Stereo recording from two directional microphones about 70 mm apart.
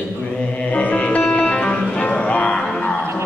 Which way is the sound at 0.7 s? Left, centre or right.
Centre.